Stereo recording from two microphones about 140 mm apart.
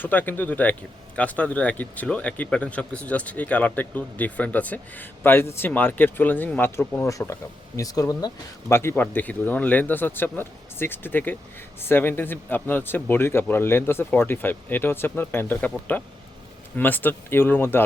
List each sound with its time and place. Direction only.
0.0 s speech: 15° left (ahead or behind)